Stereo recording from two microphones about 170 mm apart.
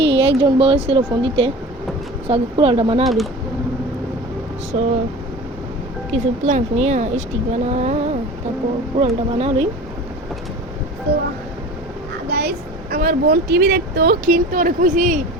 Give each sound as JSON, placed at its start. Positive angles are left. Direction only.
{"t": 0.2, "sound": "speech", "side_deg": -35}
{"t": 3.0, "sound": "speech", "side_deg": 0}
{"t": 4.7, "sound": "speech", "side_deg": -35}
{"t": 6.1, "sound": "speech", "side_deg": -40}
{"t": 12.3, "sound": "speech", "side_deg": -70}